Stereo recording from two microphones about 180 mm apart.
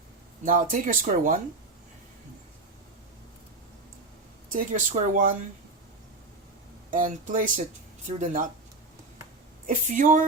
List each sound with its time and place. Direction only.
0.4 s speech: 50° right (ahead or behind)
4.5 s speech: 50° right (ahead or behind)
6.9 s speech: 50° right (ahead or behind)
9.6 s speech: 45° right (ahead or behind)